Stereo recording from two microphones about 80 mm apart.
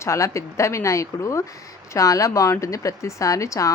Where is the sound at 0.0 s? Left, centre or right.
Left.